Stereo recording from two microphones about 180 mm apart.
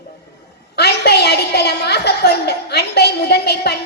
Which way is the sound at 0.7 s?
65° left (ahead or behind).